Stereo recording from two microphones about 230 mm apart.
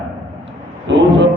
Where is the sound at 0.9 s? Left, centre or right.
Right.